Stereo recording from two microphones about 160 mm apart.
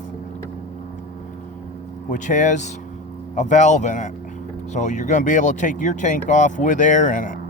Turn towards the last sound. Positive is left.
turn(degrees=55)  # may be behind; listen again after turning